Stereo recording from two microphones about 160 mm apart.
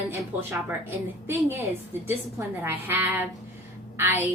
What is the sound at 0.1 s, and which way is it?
A woman's voice, 15° right (ahead or behind).